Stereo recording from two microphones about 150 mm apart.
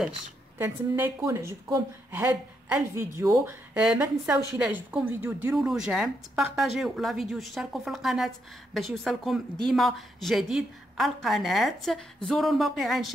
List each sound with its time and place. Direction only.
0.6 s a woman's voice: 15° right (ahead or behind)